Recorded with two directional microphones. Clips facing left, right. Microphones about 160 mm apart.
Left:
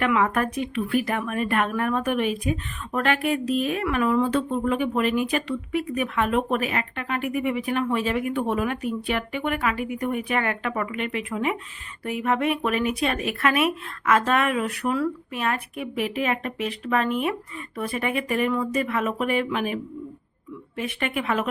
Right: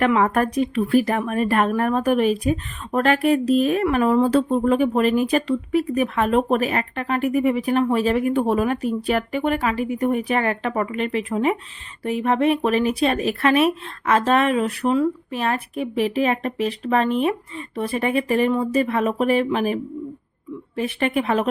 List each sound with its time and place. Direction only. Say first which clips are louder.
0.0 s speech: right 4 dB; 35° right (ahead or behind)